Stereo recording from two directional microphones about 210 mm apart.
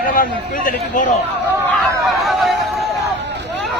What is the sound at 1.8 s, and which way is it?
Snicker, centre (ahead or behind).